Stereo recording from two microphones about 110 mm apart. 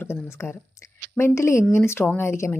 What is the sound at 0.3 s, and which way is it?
A woman's voice, 20° left (ahead or behind).